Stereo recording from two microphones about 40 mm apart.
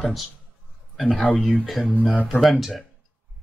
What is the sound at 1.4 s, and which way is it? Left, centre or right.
Speech, centre.